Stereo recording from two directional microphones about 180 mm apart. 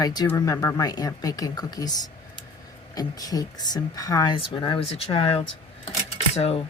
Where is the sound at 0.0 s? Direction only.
20° left (ahead or behind).